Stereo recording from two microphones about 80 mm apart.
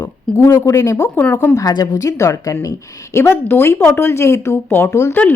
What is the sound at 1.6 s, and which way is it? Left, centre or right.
A woman's voice, left.